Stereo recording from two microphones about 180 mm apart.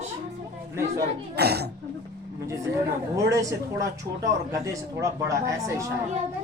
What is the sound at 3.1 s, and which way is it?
Speech, 15° right (ahead or behind).